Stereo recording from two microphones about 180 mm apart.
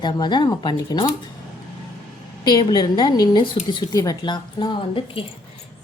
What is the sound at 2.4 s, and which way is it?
Speech, 25° left (ahead or behind).